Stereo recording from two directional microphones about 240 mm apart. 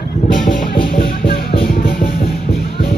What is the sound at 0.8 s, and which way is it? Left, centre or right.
Music, left.